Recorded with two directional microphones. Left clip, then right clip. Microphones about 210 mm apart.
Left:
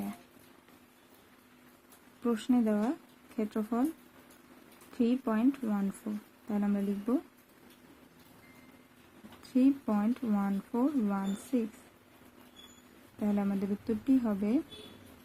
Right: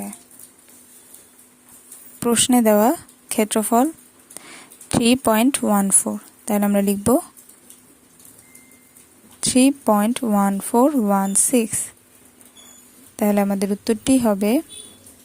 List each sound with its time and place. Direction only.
2.2 s speech: 45° right (ahead or behind)
5.0 s speech: 50° right (ahead or behind)
9.4 s speech: 45° right (ahead or behind)
13.1 s speech: 45° right (ahead or behind)